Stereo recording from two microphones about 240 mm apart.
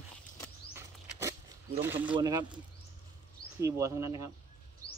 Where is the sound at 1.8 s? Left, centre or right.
Centre.